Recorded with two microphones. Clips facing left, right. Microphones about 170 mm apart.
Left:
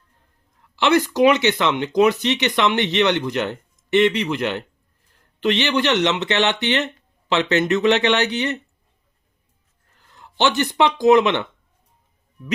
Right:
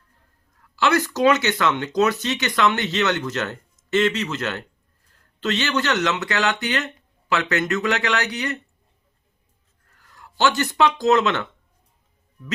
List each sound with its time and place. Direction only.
0.8 s speech: 20° left (ahead or behind)
9.9 s speech: 20° left (ahead or behind)